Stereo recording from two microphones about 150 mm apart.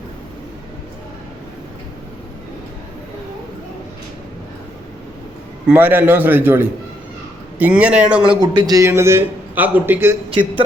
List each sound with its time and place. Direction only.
5.6 s a man's voice: 10° right (ahead or behind)
8.3 s a man's voice: 30° right (ahead or behind)